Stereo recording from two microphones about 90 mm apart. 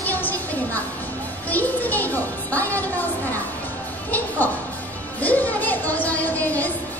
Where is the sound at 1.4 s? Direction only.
20° left (ahead or behind).